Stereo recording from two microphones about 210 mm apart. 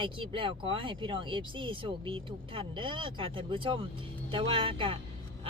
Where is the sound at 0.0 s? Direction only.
25° right (ahead or behind).